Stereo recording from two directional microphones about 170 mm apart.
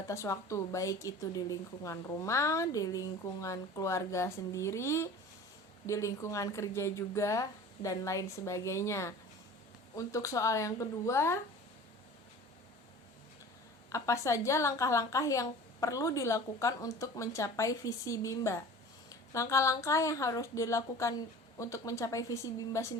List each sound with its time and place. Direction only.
0.1 s a woman's voice: 15° left (ahead or behind)
13.9 s a woman's voice: 20° left (ahead or behind)